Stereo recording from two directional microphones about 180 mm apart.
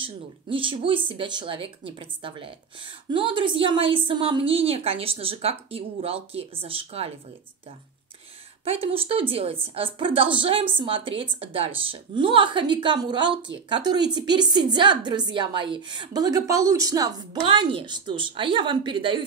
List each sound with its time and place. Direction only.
0.0 s speech: 30° right (ahead or behind)
8.6 s a woman's voice: 30° right (ahead or behind)